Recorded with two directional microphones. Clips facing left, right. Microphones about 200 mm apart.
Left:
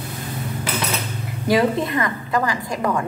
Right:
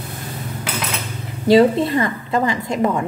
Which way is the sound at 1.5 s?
30° right (ahead or behind).